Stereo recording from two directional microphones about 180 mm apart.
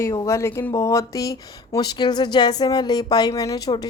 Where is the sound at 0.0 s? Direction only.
15° left (ahead or behind).